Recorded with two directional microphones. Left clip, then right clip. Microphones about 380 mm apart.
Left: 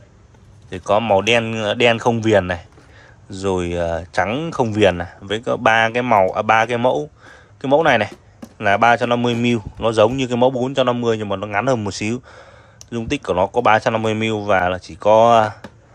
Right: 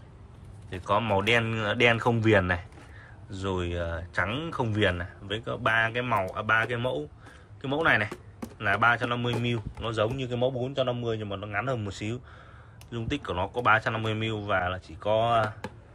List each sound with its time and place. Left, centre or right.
0.7 s speech: centre